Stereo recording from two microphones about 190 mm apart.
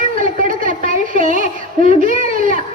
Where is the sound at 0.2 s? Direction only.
45° right (ahead or behind).